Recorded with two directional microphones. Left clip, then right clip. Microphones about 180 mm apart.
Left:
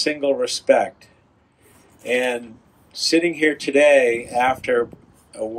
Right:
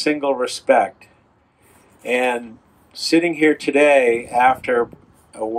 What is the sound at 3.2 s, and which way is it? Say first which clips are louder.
Speech: right 3 dB; 40° right (ahead or behind).